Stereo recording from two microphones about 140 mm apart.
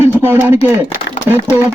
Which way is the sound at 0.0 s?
15° right (ahead or behind).